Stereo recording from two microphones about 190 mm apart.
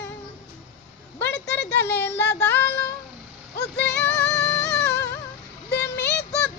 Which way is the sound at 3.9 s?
10° left (ahead or behind).